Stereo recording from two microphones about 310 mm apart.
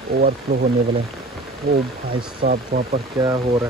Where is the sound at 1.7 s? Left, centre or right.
Right.